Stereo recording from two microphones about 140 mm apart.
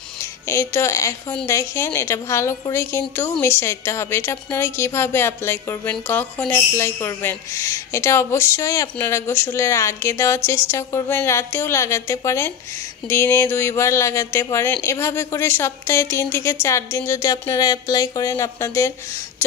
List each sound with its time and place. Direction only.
0.2 s a woman's voice: 20° left (ahead or behind)